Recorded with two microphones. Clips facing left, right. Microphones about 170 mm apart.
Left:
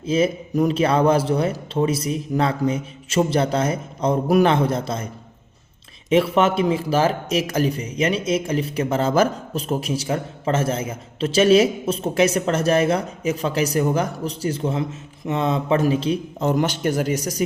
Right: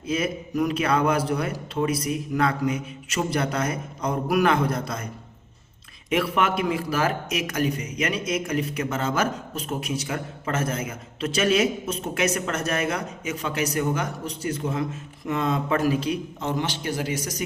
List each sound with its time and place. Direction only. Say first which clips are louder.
0.0 s a man's voice: left 6 dB; 25° left (ahead or behind)
6.1 s a man's voice: left 6 dB; 25° left (ahead or behind)
16.4 s a man's voice: left 7 dB; 45° left (ahead or behind)